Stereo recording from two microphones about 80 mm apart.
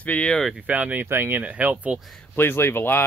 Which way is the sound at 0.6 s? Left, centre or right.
Centre.